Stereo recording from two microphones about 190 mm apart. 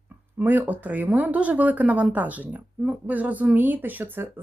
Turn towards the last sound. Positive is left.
turn(degrees=-10)  # may be behind; listen again after turning